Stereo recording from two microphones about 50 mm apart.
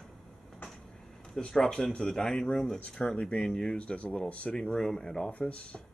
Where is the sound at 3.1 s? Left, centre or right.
Centre.